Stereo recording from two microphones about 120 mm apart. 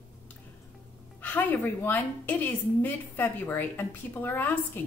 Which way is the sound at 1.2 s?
15° left (ahead or behind).